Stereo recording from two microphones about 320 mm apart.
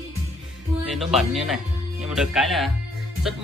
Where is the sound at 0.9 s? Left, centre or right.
Centre.